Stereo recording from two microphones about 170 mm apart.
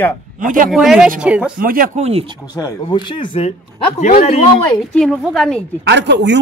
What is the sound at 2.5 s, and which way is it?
Speech, 25° left (ahead or behind).